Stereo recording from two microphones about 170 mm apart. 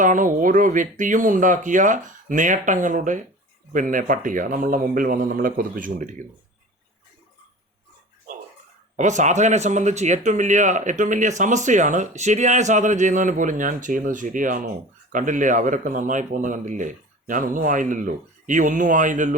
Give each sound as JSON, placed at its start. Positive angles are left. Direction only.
{"t": 0.0, "sound": "speech", "side_deg": -50}
{"t": 9.0, "sound": "speech", "side_deg": -45}